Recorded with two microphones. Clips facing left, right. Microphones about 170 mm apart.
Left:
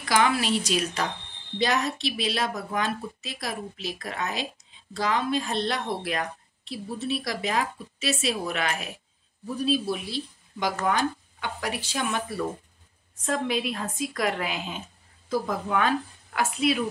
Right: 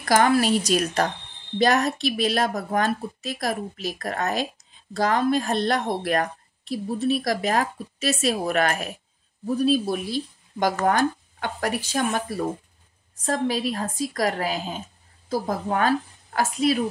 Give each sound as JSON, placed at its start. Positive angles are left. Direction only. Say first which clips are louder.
{"t": 0.0, "sound": "a woman's voice", "louder": "right 5 dB", "side_deg": -45}